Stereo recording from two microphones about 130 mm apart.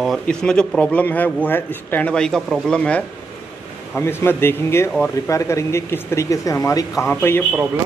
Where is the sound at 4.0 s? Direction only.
20° left (ahead or behind).